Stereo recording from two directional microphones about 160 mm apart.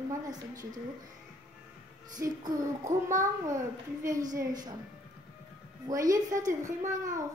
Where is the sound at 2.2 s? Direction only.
20° right (ahead or behind).